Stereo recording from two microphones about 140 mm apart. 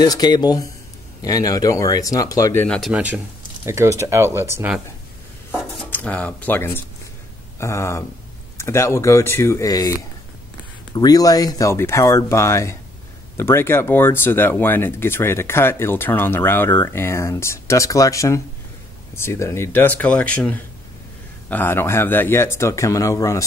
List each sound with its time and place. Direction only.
0.0 s speech: 30° left (ahead or behind)
2.8 s a man's voice: 10° right (ahead or behind)
5.5 s cutlery: 10° left (ahead or behind)
7.5 s speech: 20° left (ahead or behind)
11.0 s speech: 25° left (ahead or behind)